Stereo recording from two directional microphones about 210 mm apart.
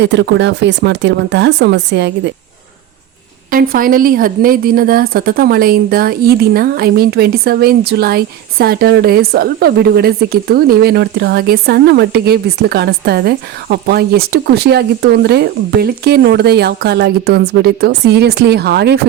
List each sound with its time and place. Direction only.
0.0 s speech: 55° right (ahead or behind)
3.5 s speech: 40° right (ahead or behind)